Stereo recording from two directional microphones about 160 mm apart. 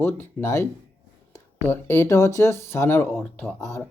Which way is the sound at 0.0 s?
10° left (ahead or behind).